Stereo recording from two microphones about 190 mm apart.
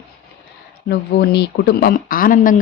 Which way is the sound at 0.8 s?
60° left (ahead or behind).